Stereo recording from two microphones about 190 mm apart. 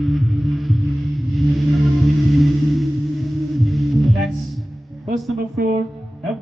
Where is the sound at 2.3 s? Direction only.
Centre (ahead or behind).